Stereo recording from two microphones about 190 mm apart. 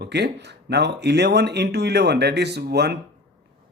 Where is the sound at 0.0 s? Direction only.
60° right (ahead or behind).